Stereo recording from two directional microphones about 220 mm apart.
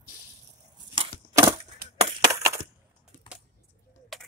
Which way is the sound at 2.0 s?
20° right (ahead or behind).